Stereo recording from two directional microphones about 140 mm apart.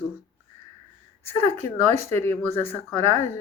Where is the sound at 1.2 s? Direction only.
15° left (ahead or behind).